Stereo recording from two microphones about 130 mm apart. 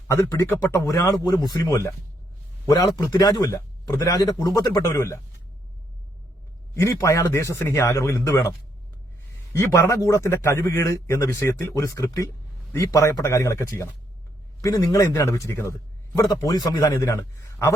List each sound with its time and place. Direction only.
0.1 s a man's voice: 20° left (ahead or behind)
6.8 s a man's voice: 25° left (ahead or behind)